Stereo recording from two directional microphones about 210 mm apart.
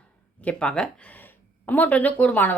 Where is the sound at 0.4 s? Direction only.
5° left (ahead or behind).